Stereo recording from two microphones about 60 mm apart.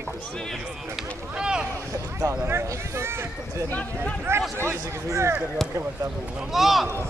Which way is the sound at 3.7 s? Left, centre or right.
Left.